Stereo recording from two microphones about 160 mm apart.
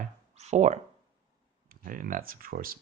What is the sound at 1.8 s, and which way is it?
Speech, 55° right (ahead or behind).